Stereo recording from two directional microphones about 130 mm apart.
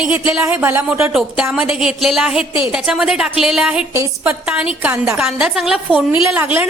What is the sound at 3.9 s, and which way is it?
A woman's voice, 15° right (ahead or behind).